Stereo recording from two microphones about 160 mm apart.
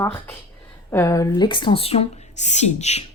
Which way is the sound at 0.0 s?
15° left (ahead or behind).